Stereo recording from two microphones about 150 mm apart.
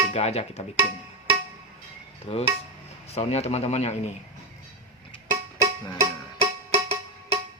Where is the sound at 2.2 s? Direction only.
40° left (ahead or behind).